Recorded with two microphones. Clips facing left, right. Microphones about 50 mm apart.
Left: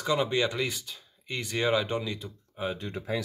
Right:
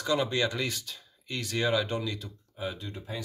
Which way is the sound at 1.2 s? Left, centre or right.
Left.